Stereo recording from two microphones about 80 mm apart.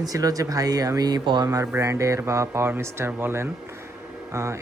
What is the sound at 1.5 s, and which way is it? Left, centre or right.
Speech, right.